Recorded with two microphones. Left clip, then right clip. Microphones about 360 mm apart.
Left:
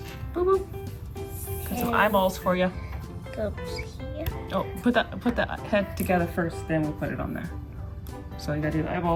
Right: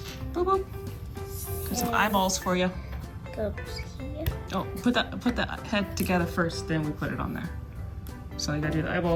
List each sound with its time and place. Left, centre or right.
0.3 s speech: centre
1.6 s speech: centre
3.3 s speech: left
4.4 s speech: centre